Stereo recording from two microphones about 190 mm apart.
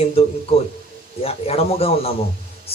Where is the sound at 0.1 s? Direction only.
30° left (ahead or behind).